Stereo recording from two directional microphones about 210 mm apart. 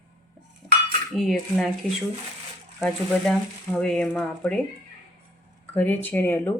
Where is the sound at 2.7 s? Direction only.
5° left (ahead or behind).